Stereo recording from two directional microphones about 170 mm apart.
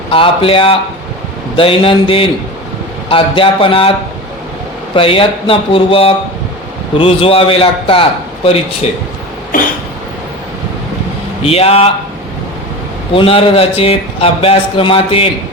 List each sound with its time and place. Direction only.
0.1 s a man's voice: 35° left (ahead or behind)
4.9 s a man's voice: 30° left (ahead or behind)
9.5 s cough: 55° left (ahead or behind)
11.4 s a man's voice: 35° left (ahead or behind)
13.1 s a man's voice: 30° left (ahead or behind)